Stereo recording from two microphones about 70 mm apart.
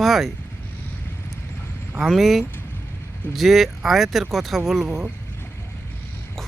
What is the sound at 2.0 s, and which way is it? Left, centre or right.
Speech, centre.